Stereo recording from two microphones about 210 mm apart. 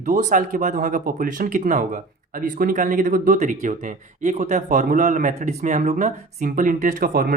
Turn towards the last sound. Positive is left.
turn(degrees=-45)  # may be behind; listen again after turning